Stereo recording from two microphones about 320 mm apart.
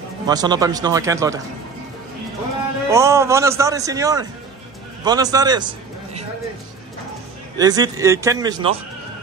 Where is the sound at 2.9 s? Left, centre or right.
Centre.